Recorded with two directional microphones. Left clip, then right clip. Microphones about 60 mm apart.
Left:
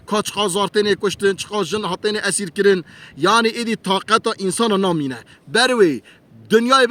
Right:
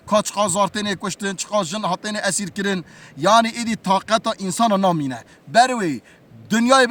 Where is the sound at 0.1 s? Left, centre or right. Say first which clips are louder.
Right 1 dB; right.